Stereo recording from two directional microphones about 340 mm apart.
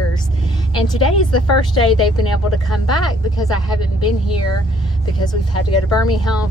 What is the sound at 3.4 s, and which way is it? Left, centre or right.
Speech, centre.